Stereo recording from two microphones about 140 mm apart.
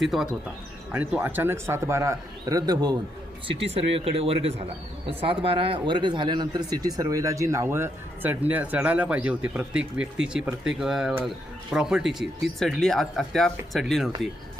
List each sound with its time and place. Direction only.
0.0 s speech: centre (ahead or behind)
0.9 s speech: 15° right (ahead or behind)
3.4 s speech: 40° right (ahead or behind); by 14.1 s centre (ahead or behind)